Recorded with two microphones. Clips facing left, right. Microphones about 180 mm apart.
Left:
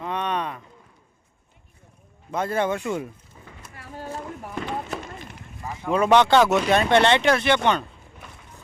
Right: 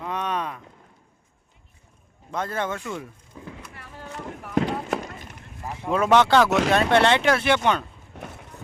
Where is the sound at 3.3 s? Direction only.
90° right.